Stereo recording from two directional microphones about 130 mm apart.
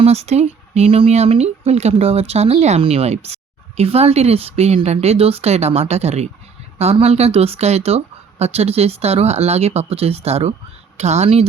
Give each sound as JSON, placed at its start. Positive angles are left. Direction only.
{"t": 0.0, "sound": "speech", "side_deg": -55}